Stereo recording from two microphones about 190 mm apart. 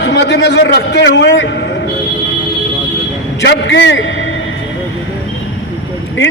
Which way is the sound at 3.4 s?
65° left (ahead or behind).